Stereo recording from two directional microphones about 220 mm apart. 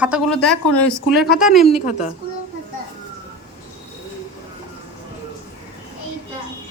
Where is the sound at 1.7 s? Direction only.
30° left (ahead or behind).